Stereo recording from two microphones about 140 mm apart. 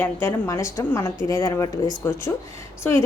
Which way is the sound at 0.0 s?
15° left (ahead or behind).